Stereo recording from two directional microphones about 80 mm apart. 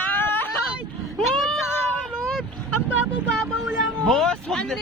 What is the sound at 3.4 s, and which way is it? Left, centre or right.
Vehicle, centre.